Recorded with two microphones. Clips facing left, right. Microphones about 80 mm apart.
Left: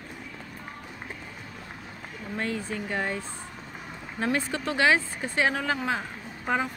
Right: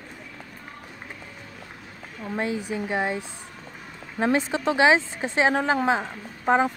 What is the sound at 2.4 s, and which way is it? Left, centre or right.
Speech, centre.